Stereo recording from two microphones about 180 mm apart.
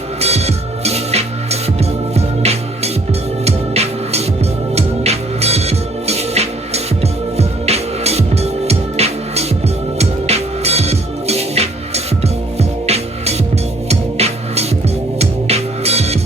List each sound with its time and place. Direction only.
0.2 s music: 35° right (ahead or behind)